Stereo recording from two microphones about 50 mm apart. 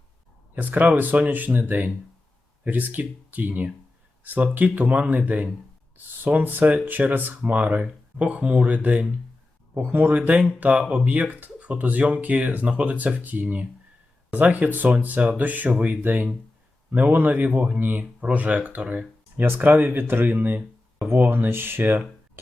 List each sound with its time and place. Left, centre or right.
0.5 s speech: right
9.8 s speech: right
19.4 s speech: right